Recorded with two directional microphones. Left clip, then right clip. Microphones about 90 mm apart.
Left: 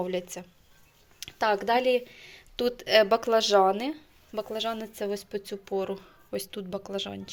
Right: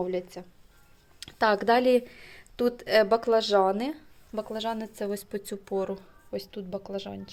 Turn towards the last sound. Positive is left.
turn(degrees=5)  # may be behind; listen again after turning